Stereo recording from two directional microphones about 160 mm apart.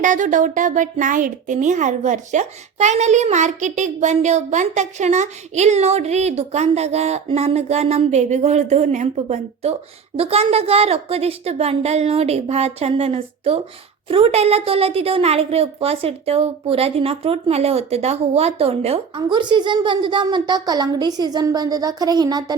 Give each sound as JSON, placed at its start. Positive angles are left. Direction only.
{"t": 0.0, "sound": "a woman's voice", "side_deg": -50}